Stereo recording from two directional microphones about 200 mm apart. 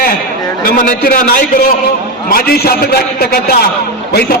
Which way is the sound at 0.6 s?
45° left (ahead or behind).